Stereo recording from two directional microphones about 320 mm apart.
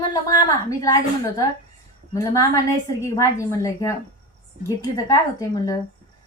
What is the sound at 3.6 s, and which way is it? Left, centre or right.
A woman's voice, centre.